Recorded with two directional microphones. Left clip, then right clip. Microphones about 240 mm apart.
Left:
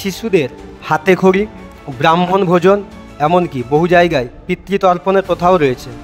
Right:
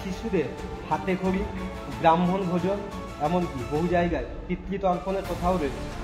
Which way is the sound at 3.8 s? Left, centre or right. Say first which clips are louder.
Left 14 dB; left.